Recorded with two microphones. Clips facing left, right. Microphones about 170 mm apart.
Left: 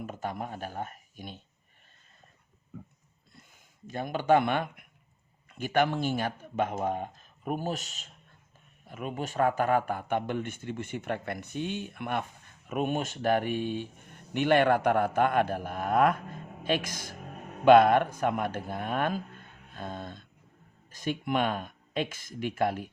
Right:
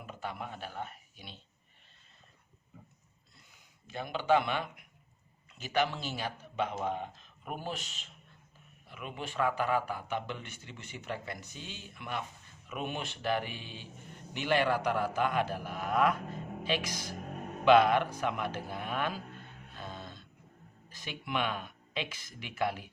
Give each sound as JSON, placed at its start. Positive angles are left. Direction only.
{"t": 0.0, "sound": "speech", "side_deg": 45}
{"t": 3.8, "sound": "speech", "side_deg": 45}
{"t": 19.7, "sound": "a sound", "side_deg": 50}
{"t": 20.9, "sound": "speech", "side_deg": 45}